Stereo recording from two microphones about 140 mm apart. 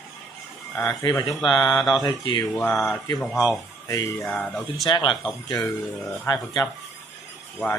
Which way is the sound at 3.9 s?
25° left (ahead or behind).